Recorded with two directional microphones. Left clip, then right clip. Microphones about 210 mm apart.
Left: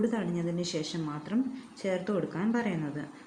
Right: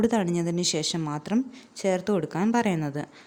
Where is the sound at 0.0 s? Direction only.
50° right (ahead or behind).